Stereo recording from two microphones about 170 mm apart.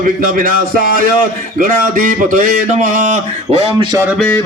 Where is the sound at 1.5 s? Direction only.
50° right (ahead or behind).